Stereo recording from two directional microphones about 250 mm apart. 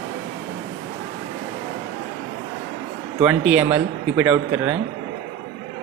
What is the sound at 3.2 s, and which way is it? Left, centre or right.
Speech, centre.